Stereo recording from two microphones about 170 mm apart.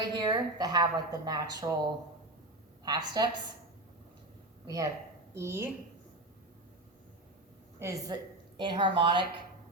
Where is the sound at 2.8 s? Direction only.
25° right (ahead or behind).